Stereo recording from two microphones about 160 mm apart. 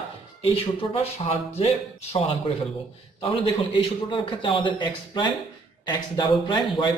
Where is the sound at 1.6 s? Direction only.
40° left (ahead or behind).